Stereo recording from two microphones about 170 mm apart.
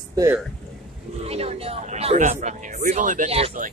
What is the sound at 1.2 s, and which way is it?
Speech, 35° right (ahead or behind).